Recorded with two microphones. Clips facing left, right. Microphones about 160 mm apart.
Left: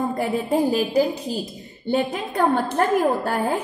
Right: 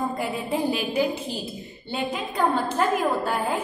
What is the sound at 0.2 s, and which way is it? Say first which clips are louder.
A woman's voice: left 5 dB; 40° left (ahead or behind).